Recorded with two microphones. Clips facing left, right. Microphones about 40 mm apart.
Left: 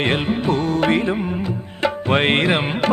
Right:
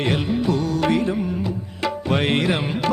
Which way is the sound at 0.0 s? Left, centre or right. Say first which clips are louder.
Left 2 dB; left.